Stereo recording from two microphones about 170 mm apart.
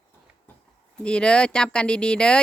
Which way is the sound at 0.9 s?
5° left (ahead or behind).